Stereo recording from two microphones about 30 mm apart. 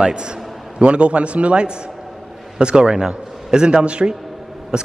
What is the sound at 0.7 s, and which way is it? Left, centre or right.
Speech, right.